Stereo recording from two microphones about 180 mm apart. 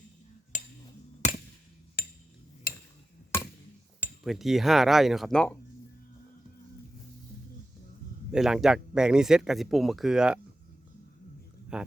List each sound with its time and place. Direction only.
0.5 s a sound: 45° left (ahead or behind)
2.0 s a sound: 60° left (ahead or behind)
2.7 s tick-tock: 55° left (ahead or behind)
4.2 s a man's voice: centre (ahead or behind)
8.3 s a man's voice: 5° right (ahead or behind)
11.7 s a man's voice: 5° right (ahead or behind)